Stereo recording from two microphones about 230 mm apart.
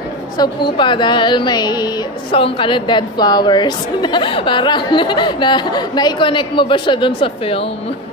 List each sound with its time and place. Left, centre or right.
0.4 s a woman's voice: centre